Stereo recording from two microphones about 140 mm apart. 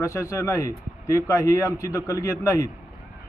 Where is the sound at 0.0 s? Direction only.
25° left (ahead or behind).